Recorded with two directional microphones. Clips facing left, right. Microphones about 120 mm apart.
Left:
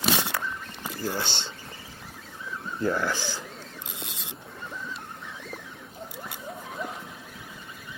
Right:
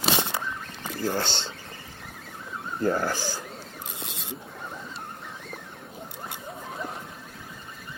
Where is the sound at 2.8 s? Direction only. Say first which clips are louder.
Right 1 dB; 45° right (ahead or behind).